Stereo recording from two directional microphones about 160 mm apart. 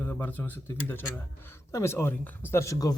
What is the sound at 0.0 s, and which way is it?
A man's voice, 10° left (ahead or behind).